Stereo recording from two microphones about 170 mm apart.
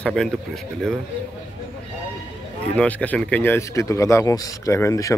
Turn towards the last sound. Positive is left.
turn(degrees=20)  # may be behind; listen again after turning